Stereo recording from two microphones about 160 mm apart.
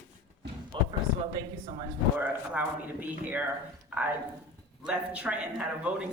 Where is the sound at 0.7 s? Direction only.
30° right (ahead or behind).